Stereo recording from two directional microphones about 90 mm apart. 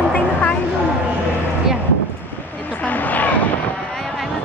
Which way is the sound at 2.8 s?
20° left (ahead or behind).